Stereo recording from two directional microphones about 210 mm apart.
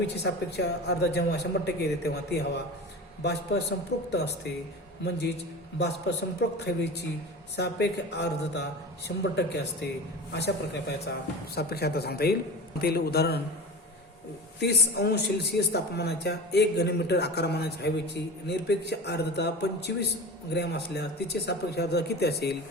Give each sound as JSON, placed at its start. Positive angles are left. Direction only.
{"t": 0.2, "sound": "a man's voice", "side_deg": 55}
{"t": 5.8, "sound": "a man's voice", "side_deg": 50}
{"t": 7.5, "sound": "a man's voice", "side_deg": 50}
{"t": 14.6, "sound": "a man's voice", "side_deg": 50}